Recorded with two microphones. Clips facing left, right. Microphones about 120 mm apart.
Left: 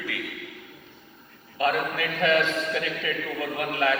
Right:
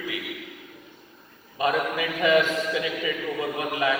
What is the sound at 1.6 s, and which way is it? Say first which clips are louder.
A man's voice: right 1 dB; 15° right (ahead or behind).